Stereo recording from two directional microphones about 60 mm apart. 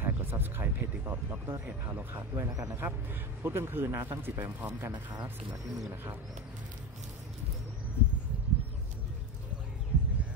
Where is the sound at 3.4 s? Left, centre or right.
Right.